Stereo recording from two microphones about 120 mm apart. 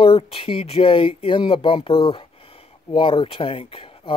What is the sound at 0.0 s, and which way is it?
Speech, 50° left (ahead or behind).